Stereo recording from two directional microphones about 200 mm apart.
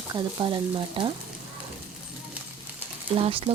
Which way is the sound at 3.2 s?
25° right (ahead or behind).